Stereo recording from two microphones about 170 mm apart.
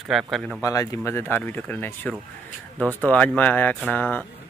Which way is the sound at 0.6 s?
20° left (ahead or behind).